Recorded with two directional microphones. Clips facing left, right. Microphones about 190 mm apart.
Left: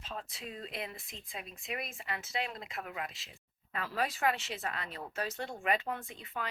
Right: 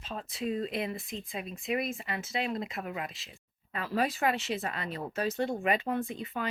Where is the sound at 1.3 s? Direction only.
10° right (ahead or behind).